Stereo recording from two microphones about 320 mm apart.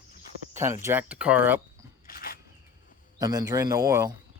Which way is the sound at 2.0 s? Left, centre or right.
Left.